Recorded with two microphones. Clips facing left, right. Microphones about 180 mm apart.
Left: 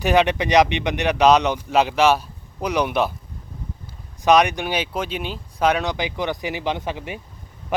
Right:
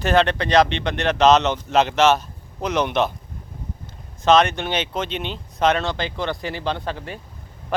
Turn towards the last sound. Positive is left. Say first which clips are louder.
# left 1 dB
turn(degrees=15)  # may be behind; listen again after turning